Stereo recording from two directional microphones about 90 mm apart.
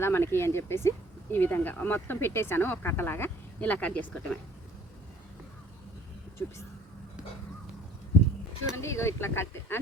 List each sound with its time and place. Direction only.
0.0 s speech: 30° left (ahead or behind)
6.4 s speech: 30° left (ahead or behind)
8.8 s speech: 30° left (ahead or behind)